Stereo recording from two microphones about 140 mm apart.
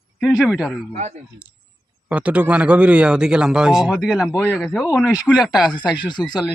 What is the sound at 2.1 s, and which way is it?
Speech, 10° right (ahead or behind).